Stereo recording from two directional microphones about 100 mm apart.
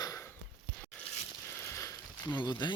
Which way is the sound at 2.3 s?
50° left (ahead or behind).